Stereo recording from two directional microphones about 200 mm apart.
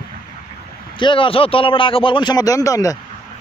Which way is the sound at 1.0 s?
25° left (ahead or behind).